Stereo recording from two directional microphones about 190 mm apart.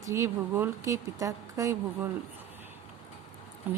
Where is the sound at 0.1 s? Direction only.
15° right (ahead or behind).